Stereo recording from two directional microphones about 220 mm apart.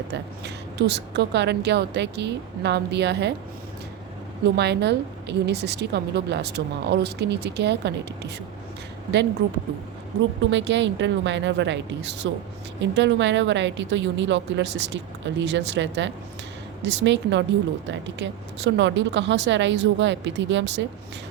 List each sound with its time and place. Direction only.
0.1 s a woman's voice: 50° right (ahead or behind)
4.4 s a woman's voice: 50° right (ahead or behind)
9.4 s a woman's voice: 60° right (ahead or behind)